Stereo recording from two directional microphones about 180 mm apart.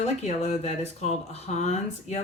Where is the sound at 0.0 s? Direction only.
40° left (ahead or behind).